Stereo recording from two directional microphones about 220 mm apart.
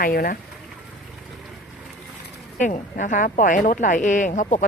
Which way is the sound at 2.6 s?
35° left (ahead or behind).